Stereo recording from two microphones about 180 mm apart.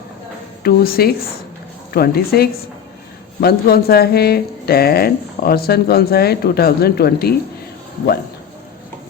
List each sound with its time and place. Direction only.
0.6 s speech: 60° left (ahead or behind)